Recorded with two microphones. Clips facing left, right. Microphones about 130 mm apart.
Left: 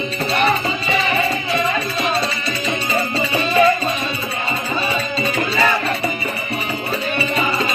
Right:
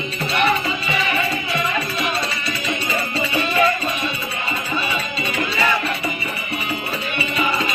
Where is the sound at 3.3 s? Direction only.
30° left (ahead or behind).